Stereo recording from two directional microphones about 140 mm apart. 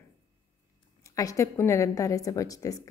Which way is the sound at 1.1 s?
25° left (ahead or behind).